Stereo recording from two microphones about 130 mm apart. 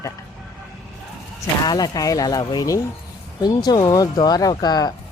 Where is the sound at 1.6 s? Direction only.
30° left (ahead or behind).